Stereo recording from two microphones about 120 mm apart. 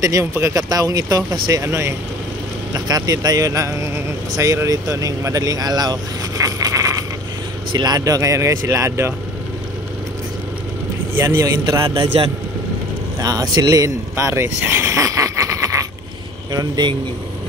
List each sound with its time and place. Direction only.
0.0 s a man's voice: 25° right (ahead or behind)
11.1 s a man's voice: 25° right (ahead or behind)
13.2 s speech: 30° right (ahead or behind)